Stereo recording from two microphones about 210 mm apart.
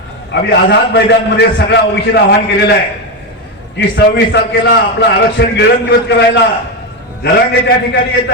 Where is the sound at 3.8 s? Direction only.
55° left (ahead or behind).